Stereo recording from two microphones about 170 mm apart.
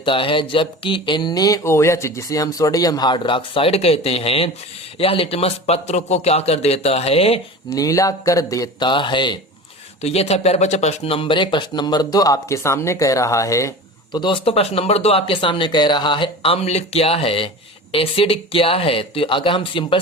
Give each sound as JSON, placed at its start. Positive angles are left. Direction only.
{"t": 0.0, "sound": "a man's voice", "side_deg": 30}
{"t": 7.7, "sound": "a man's voice", "side_deg": 20}